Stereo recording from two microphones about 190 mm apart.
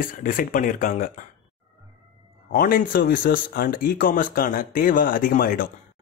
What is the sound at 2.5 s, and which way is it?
Speech, 50° left (ahead or behind).